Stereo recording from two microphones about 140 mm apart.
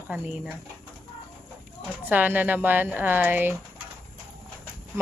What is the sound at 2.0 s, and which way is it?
Speech, 10° right (ahead or behind).